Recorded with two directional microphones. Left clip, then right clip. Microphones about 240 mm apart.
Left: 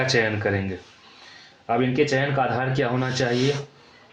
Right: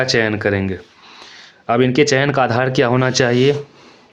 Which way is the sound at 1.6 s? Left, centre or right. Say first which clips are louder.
Right 7 dB; right.